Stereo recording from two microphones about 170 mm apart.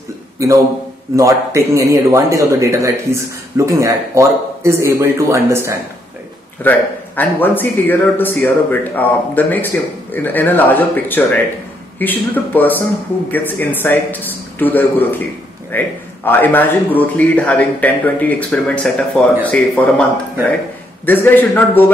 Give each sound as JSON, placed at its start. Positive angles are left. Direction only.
{"t": 1.1, "sound": "a man's voice", "side_deg": -15}
{"t": 6.6, "sound": "a man's voice", "side_deg": 10}